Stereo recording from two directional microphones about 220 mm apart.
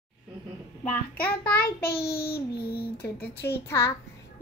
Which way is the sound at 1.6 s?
45° left (ahead or behind).